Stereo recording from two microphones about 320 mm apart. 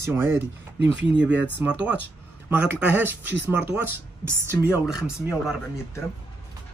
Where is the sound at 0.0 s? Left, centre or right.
Centre.